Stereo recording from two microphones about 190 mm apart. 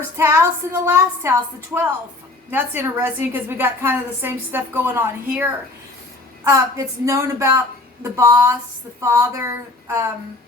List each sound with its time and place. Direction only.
0.2 s a woman's voice: 15° right (ahead or behind)